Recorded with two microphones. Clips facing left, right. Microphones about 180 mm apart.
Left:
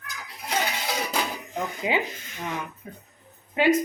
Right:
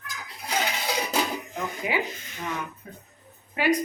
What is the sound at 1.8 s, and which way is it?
Speech, 25° left (ahead or behind).